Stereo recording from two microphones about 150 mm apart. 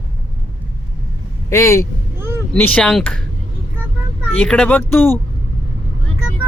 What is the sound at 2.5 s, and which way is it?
Speech, 10° left (ahead or behind).